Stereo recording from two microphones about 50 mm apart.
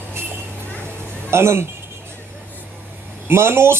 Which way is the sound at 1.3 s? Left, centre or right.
Right.